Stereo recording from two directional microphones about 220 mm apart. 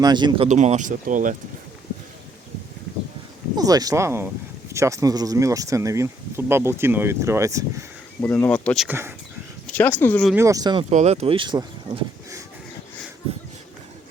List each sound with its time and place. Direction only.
0.0 s speech: 20° right (ahead or behind)
0.4 s speech: 30° right (ahead or behind)
3.5 s speech: 15° right (ahead or behind)
8.2 s speech: 5° left (ahead or behind)
10.3 s speech: 15° right (ahead or behind); by 12.0 s 30° right (ahead or behind)